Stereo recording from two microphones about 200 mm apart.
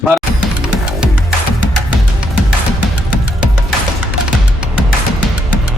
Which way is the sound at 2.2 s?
5° right (ahead or behind).